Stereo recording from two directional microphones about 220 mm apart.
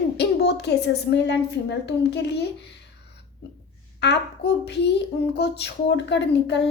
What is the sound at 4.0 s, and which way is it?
Speech, 50° left (ahead or behind).